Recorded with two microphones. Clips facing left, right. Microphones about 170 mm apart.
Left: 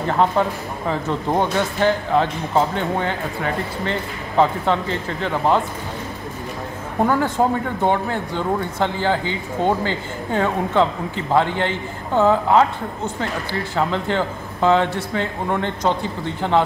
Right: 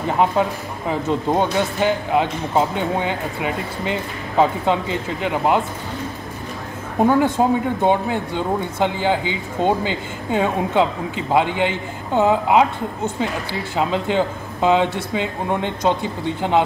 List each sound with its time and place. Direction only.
0.2 s speech: 15° right (ahead or behind)
7.1 s speech: 15° right (ahead or behind)